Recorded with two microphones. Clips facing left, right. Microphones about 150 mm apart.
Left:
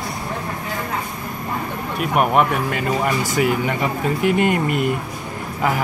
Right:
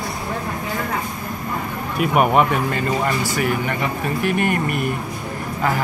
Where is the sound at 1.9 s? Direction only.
Centre (ahead or behind).